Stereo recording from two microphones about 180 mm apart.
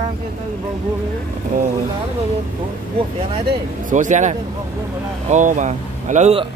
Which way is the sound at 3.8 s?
45° right (ahead or behind).